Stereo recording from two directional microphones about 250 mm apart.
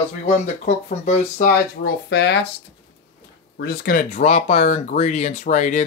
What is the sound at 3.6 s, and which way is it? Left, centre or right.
Speech, left.